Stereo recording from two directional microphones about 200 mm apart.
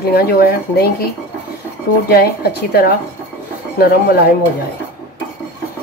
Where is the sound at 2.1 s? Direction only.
50° left (ahead or behind).